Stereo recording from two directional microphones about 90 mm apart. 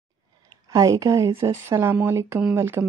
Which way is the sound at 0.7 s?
40° right (ahead or behind).